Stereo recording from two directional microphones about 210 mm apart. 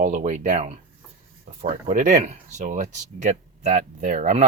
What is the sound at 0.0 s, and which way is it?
Speech, 35° right (ahead or behind).